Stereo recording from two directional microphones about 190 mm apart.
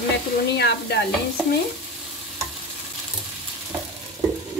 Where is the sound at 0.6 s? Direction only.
60° left (ahead or behind).